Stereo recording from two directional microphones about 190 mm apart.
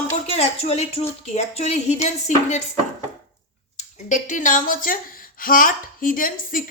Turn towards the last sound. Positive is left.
turn(degrees=45)  # may be behind; listen again after turning